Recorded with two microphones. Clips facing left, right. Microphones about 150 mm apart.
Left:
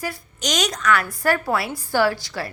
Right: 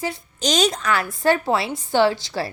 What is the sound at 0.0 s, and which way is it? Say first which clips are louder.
A woman's voice: right 3 dB; 25° right (ahead or behind).